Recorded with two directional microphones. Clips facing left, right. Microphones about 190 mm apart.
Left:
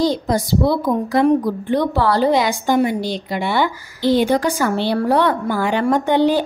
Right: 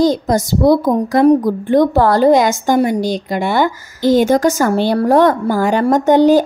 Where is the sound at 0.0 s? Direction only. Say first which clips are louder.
Right 4 dB; 45° right (ahead or behind).